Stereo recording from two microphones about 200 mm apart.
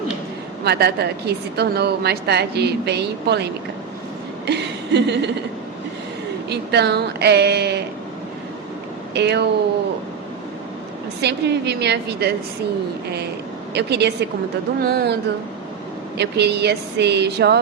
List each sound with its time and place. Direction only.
0.6 s a woman's voice: 55° right (ahead or behind)
4.4 s chuckle: 60° right (ahead or behind)
6.5 s a woman's voice: 55° right (ahead or behind)
9.1 s a woman's voice: 60° right (ahead or behind)
11.2 s a woman's voice: 55° right (ahead or behind)
13.7 s a woman's voice: 55° right (ahead or behind)
16.1 s a woman's voice: 55° right (ahead or behind)